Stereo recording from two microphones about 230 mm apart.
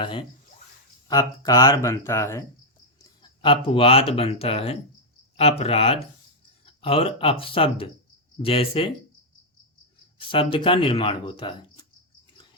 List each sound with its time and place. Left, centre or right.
0.0 s speech: left
3.0 s speech: left
10.2 s speech: left